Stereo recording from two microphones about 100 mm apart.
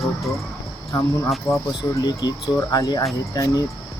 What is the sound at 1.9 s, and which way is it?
Speech, 40° left (ahead or behind).